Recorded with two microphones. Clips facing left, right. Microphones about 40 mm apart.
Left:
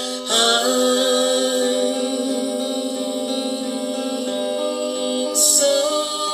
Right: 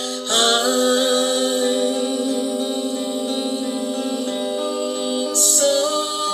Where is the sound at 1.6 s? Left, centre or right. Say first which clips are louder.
Even; centre.